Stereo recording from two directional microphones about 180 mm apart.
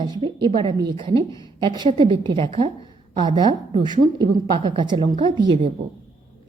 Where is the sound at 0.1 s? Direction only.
25° right (ahead or behind).